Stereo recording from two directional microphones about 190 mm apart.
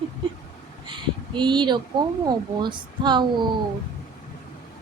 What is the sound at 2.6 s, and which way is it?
Speech, 25° right (ahead or behind).